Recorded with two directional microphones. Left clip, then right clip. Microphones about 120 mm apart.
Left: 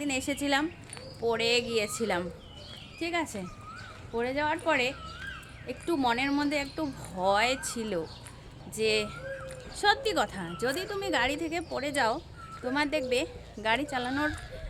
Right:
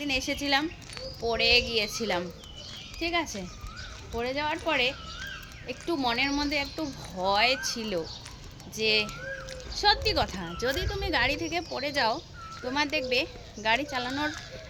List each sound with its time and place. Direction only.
0.0 s speech: 35° left (ahead or behind)